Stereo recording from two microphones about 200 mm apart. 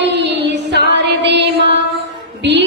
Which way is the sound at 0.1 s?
60° right (ahead or behind).